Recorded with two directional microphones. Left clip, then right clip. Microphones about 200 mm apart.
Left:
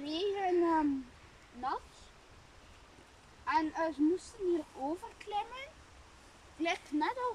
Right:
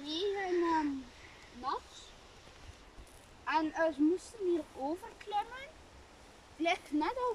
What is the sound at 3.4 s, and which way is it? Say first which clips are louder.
A child's voice: right 1 dB; centre (ahead or behind).